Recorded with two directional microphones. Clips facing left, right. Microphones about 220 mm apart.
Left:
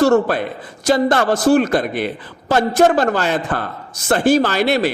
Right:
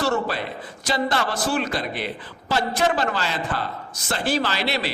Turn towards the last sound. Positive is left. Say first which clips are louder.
# left 9 dB
turn(degrees=50)  # may be behind; listen again after turning